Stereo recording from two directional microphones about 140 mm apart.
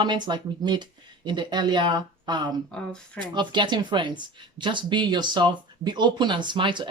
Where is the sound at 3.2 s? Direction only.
35° right (ahead or behind).